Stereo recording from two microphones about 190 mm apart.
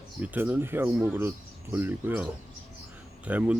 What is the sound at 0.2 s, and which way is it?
Speech, 10° right (ahead or behind).